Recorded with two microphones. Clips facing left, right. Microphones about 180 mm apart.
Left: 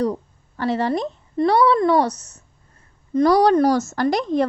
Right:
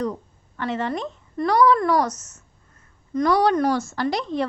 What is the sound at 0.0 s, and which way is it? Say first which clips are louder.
A woman's voice: left 5 dB; 35° left (ahead or behind).